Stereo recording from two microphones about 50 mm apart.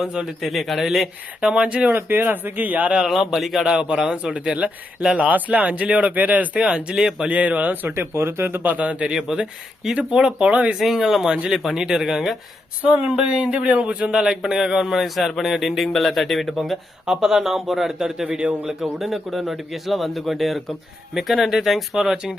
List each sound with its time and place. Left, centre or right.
0.0 s speech: centre
0.4 s speech: centre
1.9 s speech: right
3.1 s a man's voice: centre
3.7 s speech: centre; by 6.7 s right
6.7 s speech: centre
7.3 s speech: right
8.1 s speech: right
8.7 s speech: right
9.1 s speech: centre; by 10.8 s right
10.8 s speech: centre
12.8 s speech: right
13.1 s a man's voice: centre
17.1 s a man's voice: centre